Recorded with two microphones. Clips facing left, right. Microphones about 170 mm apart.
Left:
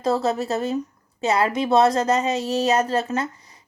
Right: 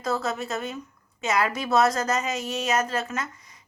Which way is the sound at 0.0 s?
30° left (ahead or behind).